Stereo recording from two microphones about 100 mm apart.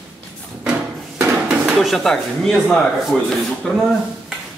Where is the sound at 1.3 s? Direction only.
5° right (ahead or behind).